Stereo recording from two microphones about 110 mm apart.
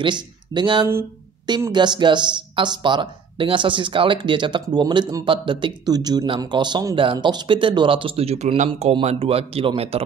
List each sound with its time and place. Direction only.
0.0 s speech: 45° right (ahead or behind); by 10.0 s 65° right (ahead or behind)